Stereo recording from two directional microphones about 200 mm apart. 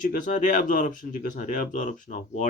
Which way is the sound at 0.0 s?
40° left (ahead or behind).